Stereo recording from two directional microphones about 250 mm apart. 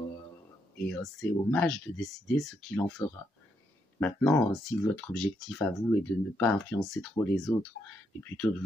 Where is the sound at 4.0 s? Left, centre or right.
Centre.